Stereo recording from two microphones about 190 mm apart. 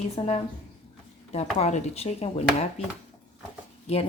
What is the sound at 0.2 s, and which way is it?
Speech, 25° left (ahead or behind).